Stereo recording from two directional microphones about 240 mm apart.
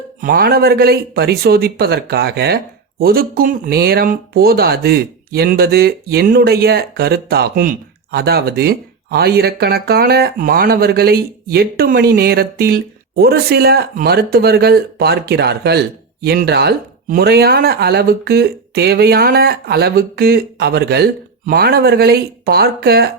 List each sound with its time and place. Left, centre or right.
0.2 s speech: right